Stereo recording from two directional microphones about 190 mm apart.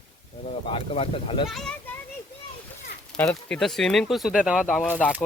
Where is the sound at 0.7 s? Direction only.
30° left (ahead or behind).